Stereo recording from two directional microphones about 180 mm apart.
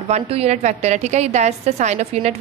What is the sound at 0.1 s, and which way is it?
A woman's voice, 35° right (ahead or behind).